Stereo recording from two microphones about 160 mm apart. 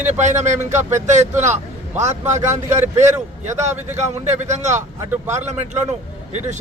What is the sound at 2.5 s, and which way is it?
Speech, 15° right (ahead or behind).